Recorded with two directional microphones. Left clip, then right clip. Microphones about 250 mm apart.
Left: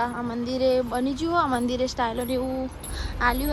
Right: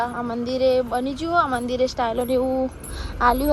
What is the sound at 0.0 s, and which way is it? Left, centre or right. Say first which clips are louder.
A woman's voice: right 3 dB; centre.